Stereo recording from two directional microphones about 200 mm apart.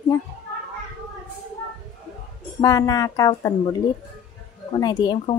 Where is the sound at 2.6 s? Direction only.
20° left (ahead or behind).